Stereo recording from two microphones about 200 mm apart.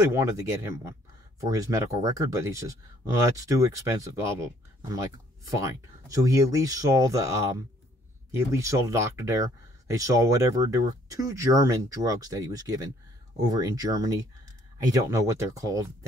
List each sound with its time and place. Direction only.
0.1 s speech: 15° right (ahead or behind)
5.5 s speech: 15° right (ahead or behind)
8.4 s speech: 15° right (ahead or behind)